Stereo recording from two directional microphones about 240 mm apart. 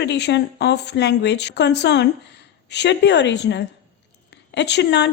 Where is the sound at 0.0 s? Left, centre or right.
Left.